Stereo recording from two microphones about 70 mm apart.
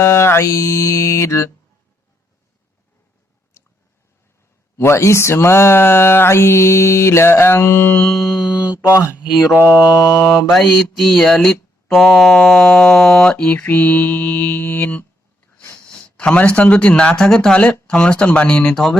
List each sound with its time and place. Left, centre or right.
0.0 s mantra: left
3.6 s a sound: left
4.8 s speech: left
8.0 s mantra: centre
8.4 s speech: right
8.7 s mantra: left
9.6 s mantra: right
10.5 s mantra: centre
11.3 s speech: centre
11.9 s mantra: centre
13.3 s mantra: centre
15.9 s a man's voice: centre